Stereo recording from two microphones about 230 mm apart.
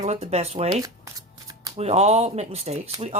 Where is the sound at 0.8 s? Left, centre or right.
Centre.